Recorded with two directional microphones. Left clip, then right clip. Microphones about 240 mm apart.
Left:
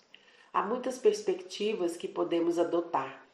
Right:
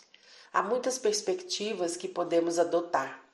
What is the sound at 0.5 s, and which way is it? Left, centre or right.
Speech, right.